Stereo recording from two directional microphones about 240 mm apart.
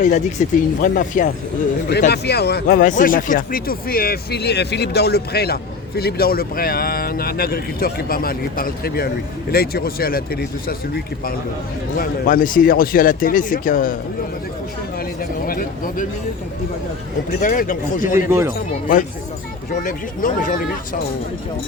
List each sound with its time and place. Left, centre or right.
0.0 s speech: left
11.9 s speech: left
15.4 s speech: left
17.4 s speech: left
18.3 s speech: centre
19.8 s speech: left